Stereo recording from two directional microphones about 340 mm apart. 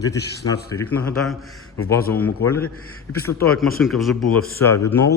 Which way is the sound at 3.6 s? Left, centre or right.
Centre.